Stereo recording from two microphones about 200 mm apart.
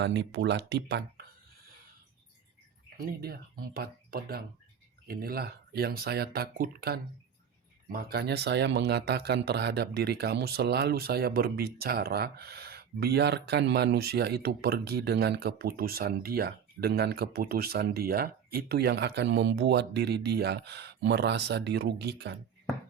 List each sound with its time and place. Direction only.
0.0 s speech: 60° right (ahead or behind)
3.2 s speech: 50° right (ahead or behind)